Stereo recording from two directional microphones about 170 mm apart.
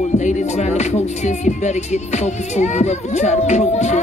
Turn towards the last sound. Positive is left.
turn(degrees=40)  # may be behind; listen again after turning